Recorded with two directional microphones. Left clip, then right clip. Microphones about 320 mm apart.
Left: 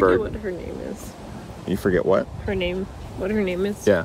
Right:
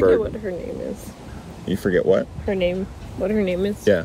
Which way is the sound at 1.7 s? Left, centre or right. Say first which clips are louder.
Right 2 dB; centre.